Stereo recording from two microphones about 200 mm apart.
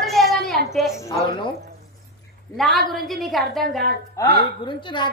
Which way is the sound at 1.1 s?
25° left (ahead or behind).